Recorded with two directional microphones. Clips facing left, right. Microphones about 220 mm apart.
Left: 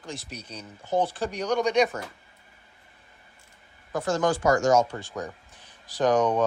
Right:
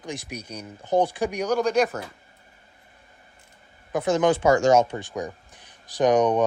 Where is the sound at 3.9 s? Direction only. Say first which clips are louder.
Right 4 dB; 20° right (ahead or behind).